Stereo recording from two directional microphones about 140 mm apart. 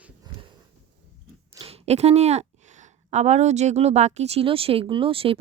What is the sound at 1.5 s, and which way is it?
A woman's voice, 45° right (ahead or behind).